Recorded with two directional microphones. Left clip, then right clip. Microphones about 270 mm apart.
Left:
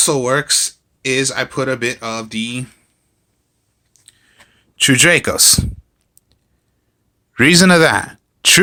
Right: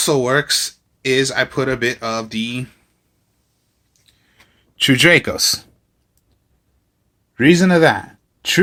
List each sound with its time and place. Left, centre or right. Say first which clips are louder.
0.0 s speech: even; centre
4.0 s clicking: left 4 dB; centre
7.3 s speech: left 3 dB; left